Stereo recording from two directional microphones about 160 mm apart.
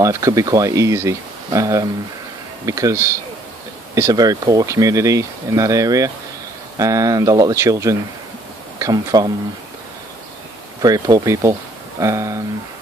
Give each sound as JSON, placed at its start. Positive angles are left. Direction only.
{"t": 0.0, "sound": "speech", "side_deg": -20}
{"t": 10.8, "sound": "speech", "side_deg": -20}